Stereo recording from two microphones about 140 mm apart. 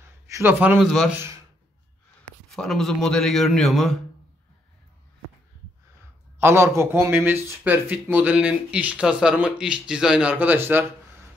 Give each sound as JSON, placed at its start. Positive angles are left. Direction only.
{"t": 0.0, "sound": "a man's voice", "side_deg": -15}
{"t": 1.1, "sound": "speech", "side_deg": -20}
{"t": 2.5, "sound": "a man's voice", "side_deg": 0}
{"t": 6.4, "sound": "speech", "side_deg": -20}